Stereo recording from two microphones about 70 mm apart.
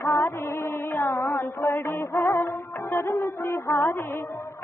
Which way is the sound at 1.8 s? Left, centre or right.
Left.